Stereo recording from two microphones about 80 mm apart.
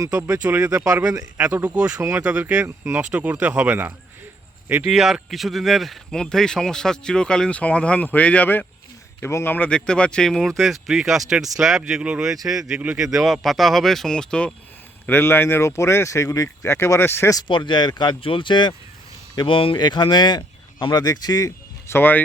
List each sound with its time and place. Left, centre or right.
0.0 s speech: right
0.4 s speech: right
1.6 s speech: centre
2.0 s speech: right
2.2 s speech: centre
2.6 s speech: right
3.0 s speech: centre
4.8 s speech: centre; by 9.6 s left
9.6 s speech: centre
15.2 s speech: left
16.7 s speech: left
17.5 s speech: left
21.1 s speech: left
21.8 s speech: left